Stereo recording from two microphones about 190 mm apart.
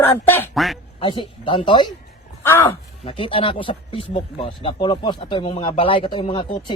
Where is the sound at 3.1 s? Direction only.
30° left (ahead or behind).